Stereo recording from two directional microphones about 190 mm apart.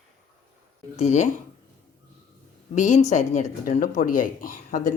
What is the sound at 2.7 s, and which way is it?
Speech, 40° left (ahead or behind).